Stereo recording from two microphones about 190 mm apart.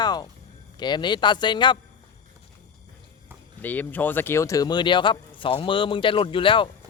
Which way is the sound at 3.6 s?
10° left (ahead or behind).